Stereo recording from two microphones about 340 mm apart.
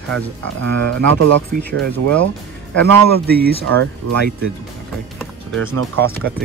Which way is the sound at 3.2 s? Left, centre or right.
Right.